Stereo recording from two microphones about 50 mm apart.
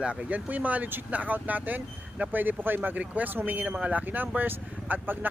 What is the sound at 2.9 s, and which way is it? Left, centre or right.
Speech, right.